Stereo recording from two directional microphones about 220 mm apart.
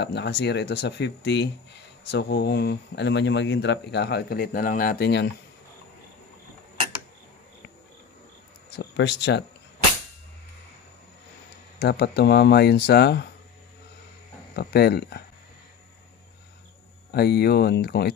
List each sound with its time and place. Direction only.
0.0 s speech: 50° left (ahead or behind)
8.7 s speech: 50° left (ahead or behind)
11.8 s speech: 45° left (ahead or behind)
14.5 s speech: 45° left (ahead or behind)
17.1 s speech: 50° left (ahead or behind)